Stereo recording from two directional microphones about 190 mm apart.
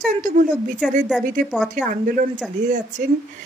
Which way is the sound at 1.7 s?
45° right (ahead or behind).